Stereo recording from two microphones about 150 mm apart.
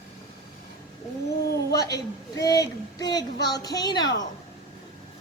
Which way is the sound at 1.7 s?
25° left (ahead or behind).